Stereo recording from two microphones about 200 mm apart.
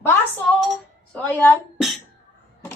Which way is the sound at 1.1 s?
10° left (ahead or behind).